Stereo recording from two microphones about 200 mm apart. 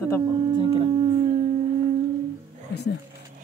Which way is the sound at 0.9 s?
30° right (ahead or behind).